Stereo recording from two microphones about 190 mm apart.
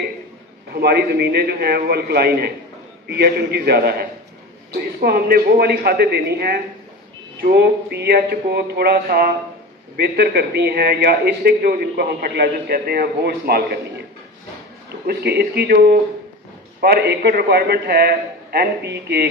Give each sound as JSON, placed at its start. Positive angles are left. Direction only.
{"t": 0.7, "sound": "a man's voice", "side_deg": -55}
{"t": 15.0, "sound": "a man's voice", "side_deg": -60}